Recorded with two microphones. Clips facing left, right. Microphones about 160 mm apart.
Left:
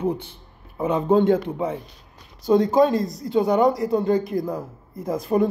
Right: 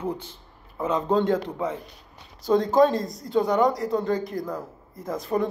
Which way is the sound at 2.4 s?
Centre (ahead or behind).